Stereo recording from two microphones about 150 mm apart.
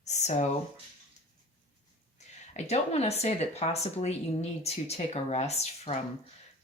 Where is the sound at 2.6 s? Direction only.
45° left (ahead or behind).